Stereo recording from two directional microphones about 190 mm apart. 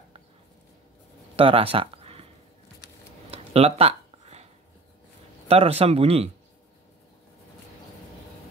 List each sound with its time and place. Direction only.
1.3 s speech: 30° right (ahead or behind)
3.3 s a sound: 30° right (ahead or behind)
5.5 s speech: 30° right (ahead or behind)